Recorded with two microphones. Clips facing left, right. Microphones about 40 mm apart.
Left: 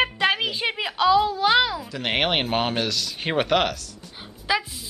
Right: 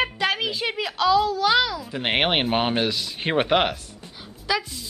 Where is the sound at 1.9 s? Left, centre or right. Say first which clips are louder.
Right 3 dB; centre.